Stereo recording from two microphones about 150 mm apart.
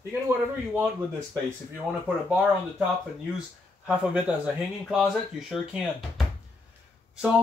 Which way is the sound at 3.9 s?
10° right (ahead or behind).